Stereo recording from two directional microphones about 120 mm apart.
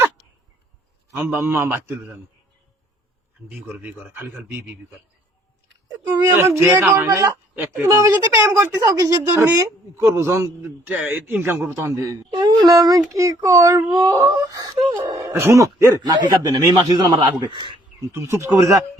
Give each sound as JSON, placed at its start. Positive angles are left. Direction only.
{"t": 1.1, "sound": "a man's voice", "side_deg": -20}
{"t": 3.5, "sound": "a man's voice", "side_deg": -15}
{"t": 6.3, "sound": "a man's voice", "side_deg": -20}
{"t": 7.9, "sound": "speech", "side_deg": -30}
{"t": 8.4, "sound": "a man's voice", "side_deg": -20}
{"t": 12.3, "sound": "speech", "side_deg": -40}
{"t": 14.6, "sound": "a man's voice", "side_deg": -40}
{"t": 15.2, "sound": "a man's voice", "side_deg": -20}
{"t": 18.1, "sound": "speech", "side_deg": -20}